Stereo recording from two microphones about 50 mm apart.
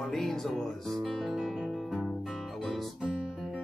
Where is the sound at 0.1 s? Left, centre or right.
Centre.